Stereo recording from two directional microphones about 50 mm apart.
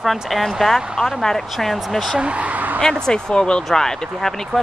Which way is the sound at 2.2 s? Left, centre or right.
Right.